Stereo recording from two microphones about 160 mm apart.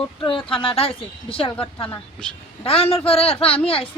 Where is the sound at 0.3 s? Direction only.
35° left (ahead or behind).